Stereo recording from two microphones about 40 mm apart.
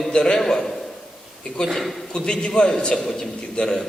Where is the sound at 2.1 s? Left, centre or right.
Left.